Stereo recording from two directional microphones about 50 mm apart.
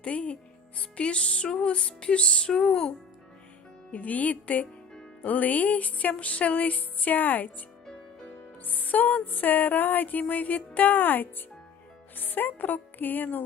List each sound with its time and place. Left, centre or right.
0.0 s music: left
3.9 s music: left
8.6 s music: left